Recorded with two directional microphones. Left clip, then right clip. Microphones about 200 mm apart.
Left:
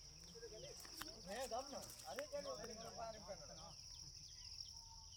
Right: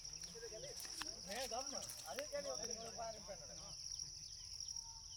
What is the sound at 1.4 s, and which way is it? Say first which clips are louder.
Speech: right 1 dB; 20° left (ahead or behind).